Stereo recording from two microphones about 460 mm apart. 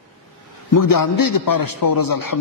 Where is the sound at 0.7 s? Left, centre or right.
Left.